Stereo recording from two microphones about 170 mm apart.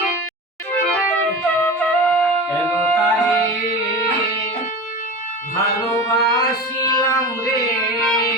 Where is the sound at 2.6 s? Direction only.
10° left (ahead or behind).